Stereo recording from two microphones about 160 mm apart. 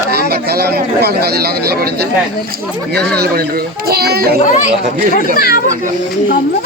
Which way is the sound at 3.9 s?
75° right (ahead or behind).